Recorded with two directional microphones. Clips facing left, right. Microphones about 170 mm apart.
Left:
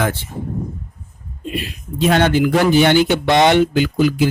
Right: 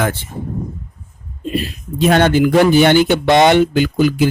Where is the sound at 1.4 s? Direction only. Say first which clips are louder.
Right 5 dB; 40° right (ahead or behind).